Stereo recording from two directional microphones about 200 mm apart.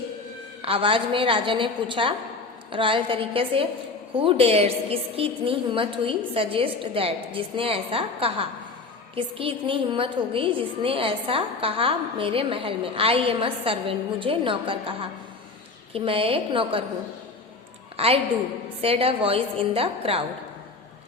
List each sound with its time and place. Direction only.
0.6 s a woman's voice: 30° right (ahead or behind)
17.9 s a woman's voice: 30° right (ahead or behind)